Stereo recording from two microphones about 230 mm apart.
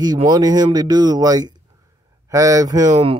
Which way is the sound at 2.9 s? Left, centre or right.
Right.